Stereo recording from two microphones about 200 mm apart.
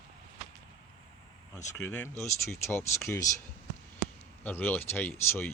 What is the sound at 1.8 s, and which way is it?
Speech, 10° left (ahead or behind).